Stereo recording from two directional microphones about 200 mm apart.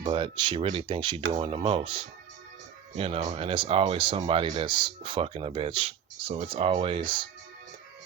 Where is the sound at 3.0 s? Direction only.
30° right (ahead or behind).